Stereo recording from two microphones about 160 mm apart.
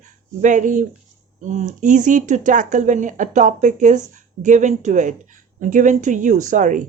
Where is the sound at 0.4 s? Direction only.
55° right (ahead or behind).